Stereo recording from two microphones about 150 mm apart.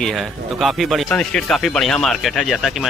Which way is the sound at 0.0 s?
Centre (ahead or behind).